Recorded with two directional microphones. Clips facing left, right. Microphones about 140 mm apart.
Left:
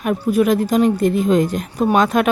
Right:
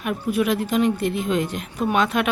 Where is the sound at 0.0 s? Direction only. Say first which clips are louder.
Left 6 dB; 45° left (ahead or behind).